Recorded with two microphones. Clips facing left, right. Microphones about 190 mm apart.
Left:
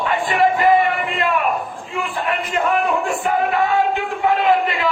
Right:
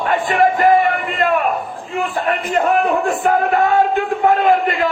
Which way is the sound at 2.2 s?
50° right (ahead or behind).